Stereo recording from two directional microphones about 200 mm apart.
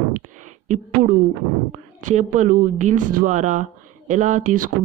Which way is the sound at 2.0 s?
35° right (ahead or behind).